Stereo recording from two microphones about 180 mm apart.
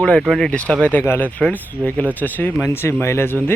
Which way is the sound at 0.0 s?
5° left (ahead or behind).